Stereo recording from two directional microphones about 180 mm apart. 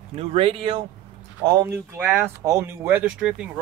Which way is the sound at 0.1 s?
35° right (ahead or behind).